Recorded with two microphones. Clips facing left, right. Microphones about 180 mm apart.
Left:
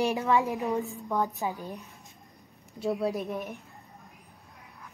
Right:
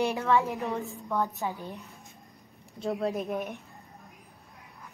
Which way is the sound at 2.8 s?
5° left (ahead or behind).